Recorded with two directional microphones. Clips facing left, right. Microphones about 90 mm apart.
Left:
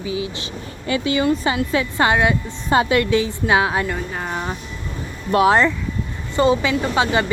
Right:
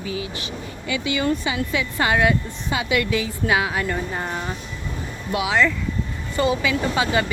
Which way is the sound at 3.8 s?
Centre (ahead or behind).